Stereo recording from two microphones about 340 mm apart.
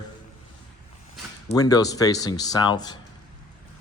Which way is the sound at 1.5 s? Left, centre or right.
Centre.